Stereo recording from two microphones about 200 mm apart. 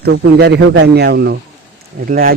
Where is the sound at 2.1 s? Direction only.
45° right (ahead or behind).